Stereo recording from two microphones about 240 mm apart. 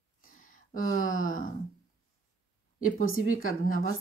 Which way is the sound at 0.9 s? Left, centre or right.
Left.